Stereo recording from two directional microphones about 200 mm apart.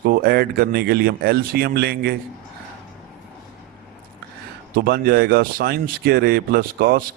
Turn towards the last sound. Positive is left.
turn(degrees=-50)  # may be behind; listen again after turning